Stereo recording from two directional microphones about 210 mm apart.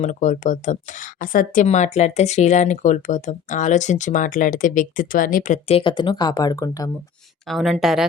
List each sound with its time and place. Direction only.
0.0 s speech: 35° left (ahead or behind); by 6.9 s 15° left (ahead or behind)
7.4 s a woman's voice: centre (ahead or behind)